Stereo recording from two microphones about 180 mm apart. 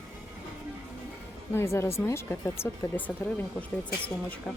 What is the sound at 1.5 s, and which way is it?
Speech, 15° left (ahead or behind).